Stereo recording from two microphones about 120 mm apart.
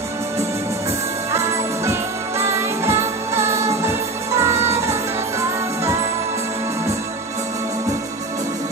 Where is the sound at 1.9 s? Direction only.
25° right (ahead or behind).